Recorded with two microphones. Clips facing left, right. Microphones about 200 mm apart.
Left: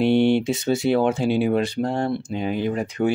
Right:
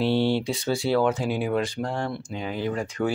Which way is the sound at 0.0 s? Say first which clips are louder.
Left 5 dB; 20° left (ahead or behind).